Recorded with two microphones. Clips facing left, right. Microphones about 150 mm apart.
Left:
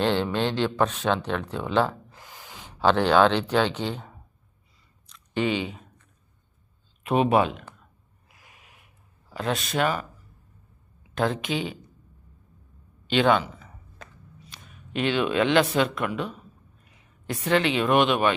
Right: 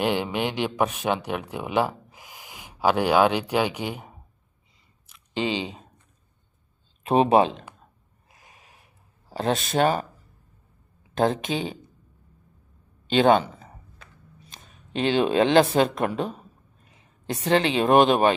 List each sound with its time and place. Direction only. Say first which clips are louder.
0.0 s speech: left 1 dB; 10° right (ahead or behind)
5.3 s speech: left 1 dB; 30° right (ahead or behind)
7.0 s speech: right 3 dB; 30° right (ahead or behind)
8.3 s a sound: right 2 dB; 25° right (ahead or behind)
9.3 s speech: right 3 dB; 30° right (ahead or behind)
11.2 s speech: right 3 dB; 40° right (ahead or behind)
13.1 s a man's voice: right 3 dB; 40° right (ahead or behind)
14.5 s a sound: right 1 dB; 45° right (ahead or behind)
14.9 s speech: right 3 dB; 35° right (ahead or behind)
16.9 s speech: right 2 dB; 25° right (ahead or behind)